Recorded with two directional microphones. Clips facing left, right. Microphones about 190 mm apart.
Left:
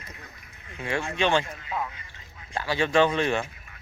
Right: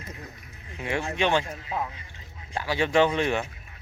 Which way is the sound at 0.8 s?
15° right (ahead or behind).